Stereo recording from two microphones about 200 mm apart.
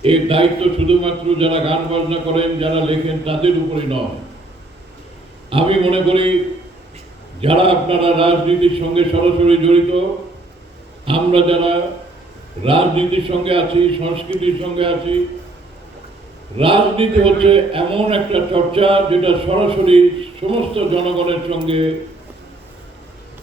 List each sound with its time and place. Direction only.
0.0 s a man's voice: 25° right (ahead or behind)
5.5 s a man's voice: 25° right (ahead or behind)
7.4 s a man's voice: 25° right (ahead or behind)
11.0 s a man's voice: 25° right (ahead or behind)
16.6 s a man's voice: 25° right (ahead or behind)